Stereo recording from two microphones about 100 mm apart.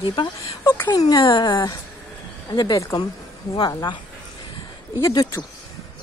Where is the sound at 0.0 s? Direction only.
55° left (ahead or behind).